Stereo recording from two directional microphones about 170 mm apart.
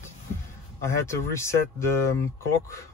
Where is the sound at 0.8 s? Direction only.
15° left (ahead or behind).